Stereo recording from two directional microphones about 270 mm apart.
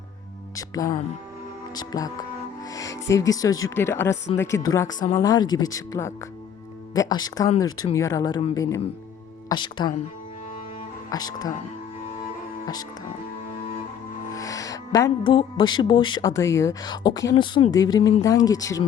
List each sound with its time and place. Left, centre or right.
0.5 s speech: centre
11.1 s speech: centre
14.3 s speech: centre